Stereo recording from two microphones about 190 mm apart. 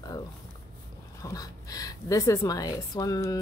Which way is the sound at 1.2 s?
20° left (ahead or behind).